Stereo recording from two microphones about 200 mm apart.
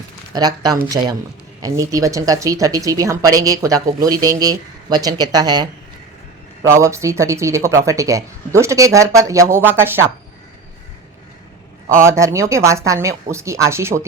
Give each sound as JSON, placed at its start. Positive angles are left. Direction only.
{"t": 0.3, "sound": "speech", "side_deg": -20}
{"t": 11.9, "sound": "speech", "side_deg": -15}